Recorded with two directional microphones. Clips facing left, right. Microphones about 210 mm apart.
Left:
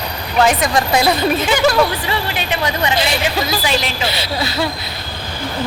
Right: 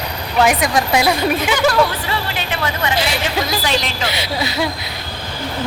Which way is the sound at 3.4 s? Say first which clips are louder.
Left 1 dB; 5° left (ahead or behind).